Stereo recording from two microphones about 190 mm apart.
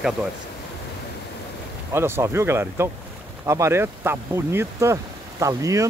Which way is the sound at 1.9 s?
15° right (ahead or behind).